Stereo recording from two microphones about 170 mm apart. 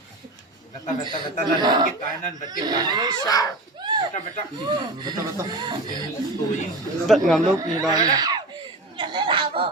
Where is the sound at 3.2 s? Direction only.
20° left (ahead or behind).